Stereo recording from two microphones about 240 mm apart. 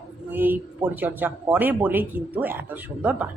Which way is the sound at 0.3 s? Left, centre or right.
Centre.